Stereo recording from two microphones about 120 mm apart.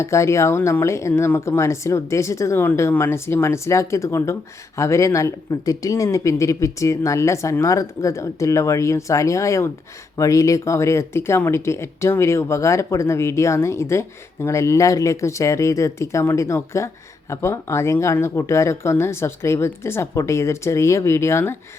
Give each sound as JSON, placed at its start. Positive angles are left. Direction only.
{"t": 0.0, "sound": "speech", "side_deg": 25}